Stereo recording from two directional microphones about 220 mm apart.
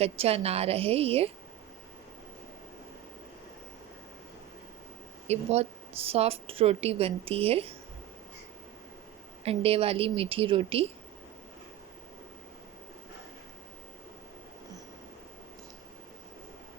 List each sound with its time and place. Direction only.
0.0 s speech: 25° right (ahead or behind)
5.3 s speech: 30° right (ahead or behind)
9.4 s speech: 25° right (ahead or behind)